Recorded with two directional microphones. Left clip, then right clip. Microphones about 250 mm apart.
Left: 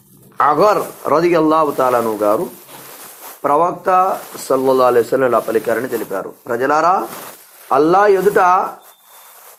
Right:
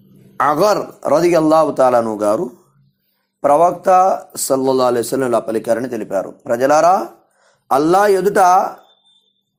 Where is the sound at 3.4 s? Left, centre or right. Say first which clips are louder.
Right 3 dB; right.